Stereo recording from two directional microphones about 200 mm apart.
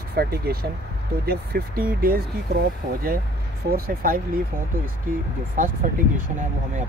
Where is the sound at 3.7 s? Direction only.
45° right (ahead or behind).